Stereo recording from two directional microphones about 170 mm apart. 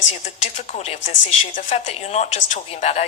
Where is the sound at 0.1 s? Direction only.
40° left (ahead or behind).